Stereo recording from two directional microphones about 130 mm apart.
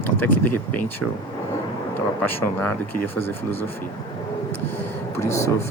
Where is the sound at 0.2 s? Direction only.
15° left (ahead or behind).